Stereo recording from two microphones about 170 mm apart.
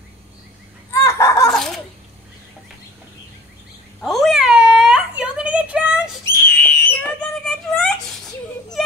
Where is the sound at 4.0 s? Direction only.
Centre (ahead or behind).